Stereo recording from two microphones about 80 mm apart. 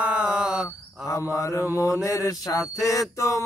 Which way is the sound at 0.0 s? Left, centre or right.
Centre.